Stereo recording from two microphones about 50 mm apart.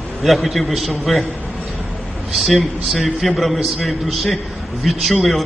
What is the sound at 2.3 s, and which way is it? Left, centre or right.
A man's voice, centre.